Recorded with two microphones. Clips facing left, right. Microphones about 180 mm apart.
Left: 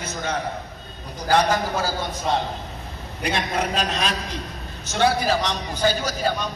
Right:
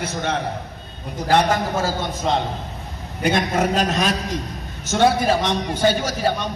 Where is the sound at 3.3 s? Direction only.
45° right (ahead or behind).